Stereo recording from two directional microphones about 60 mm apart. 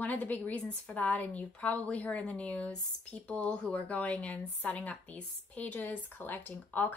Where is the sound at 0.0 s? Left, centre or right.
Left.